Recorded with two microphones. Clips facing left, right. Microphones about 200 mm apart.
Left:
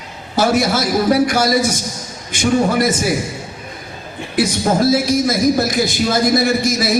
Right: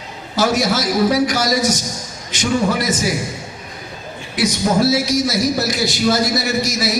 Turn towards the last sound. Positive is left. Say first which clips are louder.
# left 3 dB
turn(degrees=50)  # may be behind; listen again after turning